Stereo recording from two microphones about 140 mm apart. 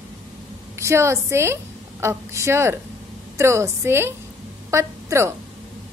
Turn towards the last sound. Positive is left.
turn(degrees=-20)  # may be behind; listen again after turning